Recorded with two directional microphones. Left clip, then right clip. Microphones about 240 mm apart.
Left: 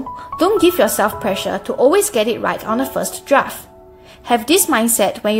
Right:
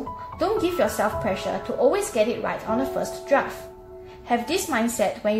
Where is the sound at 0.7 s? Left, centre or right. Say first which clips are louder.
Left 7 dB; left.